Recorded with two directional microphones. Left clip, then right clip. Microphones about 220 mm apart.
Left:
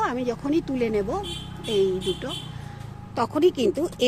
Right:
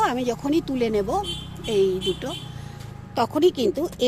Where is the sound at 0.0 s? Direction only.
10° right (ahead or behind).